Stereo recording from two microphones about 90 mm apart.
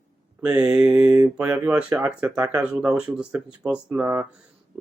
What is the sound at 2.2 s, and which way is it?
Speech, 25° right (ahead or behind).